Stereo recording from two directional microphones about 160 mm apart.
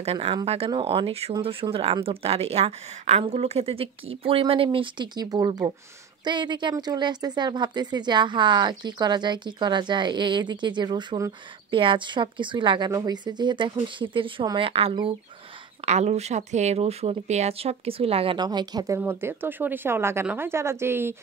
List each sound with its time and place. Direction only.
0.0 s a woman's voice: 35° right (ahead or behind)
18.9 s speech: 15° right (ahead or behind)